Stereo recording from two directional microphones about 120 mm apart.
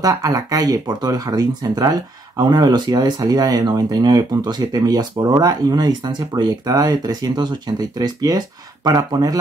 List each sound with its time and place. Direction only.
0.0 s speech: 30° right (ahead or behind)